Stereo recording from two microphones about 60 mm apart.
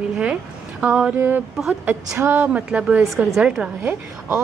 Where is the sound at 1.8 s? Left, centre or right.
Right.